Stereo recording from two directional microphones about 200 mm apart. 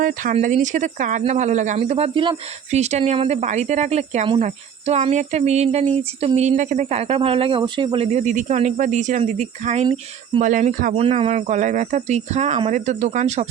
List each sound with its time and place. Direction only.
0.0 s speech: 40° right (ahead or behind)